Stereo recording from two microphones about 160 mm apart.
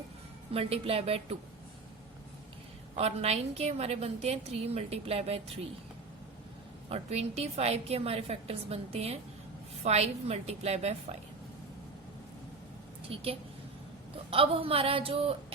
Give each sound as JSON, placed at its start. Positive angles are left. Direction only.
{"t": 0.5, "sound": "a woman's voice", "side_deg": -40}
{"t": 2.9, "sound": "a woman's voice", "side_deg": -40}
{"t": 6.9, "sound": "a woman's voice", "side_deg": -40}
{"t": 13.1, "sound": "a woman's voice", "side_deg": -35}